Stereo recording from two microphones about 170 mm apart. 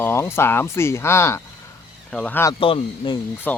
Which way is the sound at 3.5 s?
10° left (ahead or behind).